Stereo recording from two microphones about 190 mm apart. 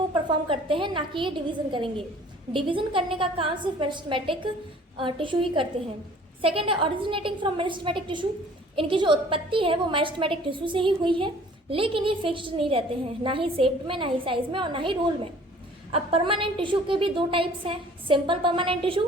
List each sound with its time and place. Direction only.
0.1 s a woman's voice: 25° right (ahead or behind)